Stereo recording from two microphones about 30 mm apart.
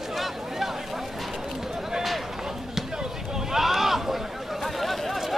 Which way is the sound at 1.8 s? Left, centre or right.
Centre.